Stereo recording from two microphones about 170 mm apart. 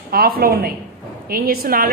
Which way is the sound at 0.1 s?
60° right (ahead or behind).